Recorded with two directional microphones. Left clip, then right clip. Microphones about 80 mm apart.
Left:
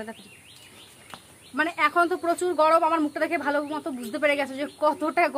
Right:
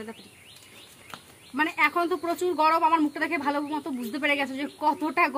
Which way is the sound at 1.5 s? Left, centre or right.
Left.